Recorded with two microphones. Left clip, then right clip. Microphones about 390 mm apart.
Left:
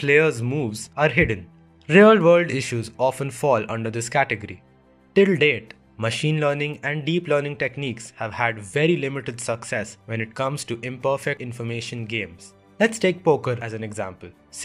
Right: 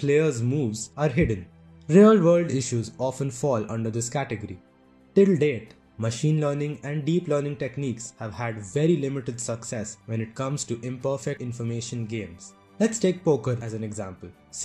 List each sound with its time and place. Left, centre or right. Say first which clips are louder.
0.0 s speech: left 4 dB; left